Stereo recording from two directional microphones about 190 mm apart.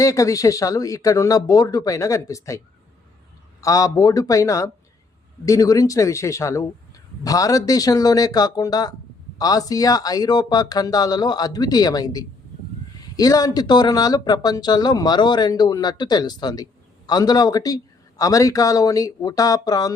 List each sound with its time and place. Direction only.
0.0 s speech: 15° left (ahead or behind)
3.6 s speech: 20° left (ahead or behind)